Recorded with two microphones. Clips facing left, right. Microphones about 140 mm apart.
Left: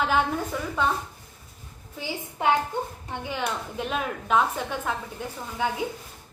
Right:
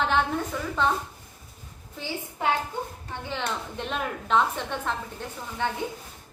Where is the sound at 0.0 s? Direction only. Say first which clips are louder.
Left 1 dB; 5° left (ahead or behind).